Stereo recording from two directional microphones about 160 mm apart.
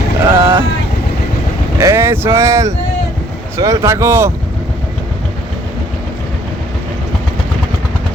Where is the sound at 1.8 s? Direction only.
15° right (ahead or behind).